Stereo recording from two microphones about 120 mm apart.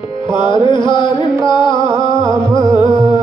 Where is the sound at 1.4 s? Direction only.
40° left (ahead or behind).